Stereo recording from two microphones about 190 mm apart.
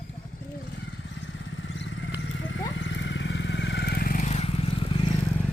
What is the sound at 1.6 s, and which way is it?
Vehicle, 75° left (ahead or behind).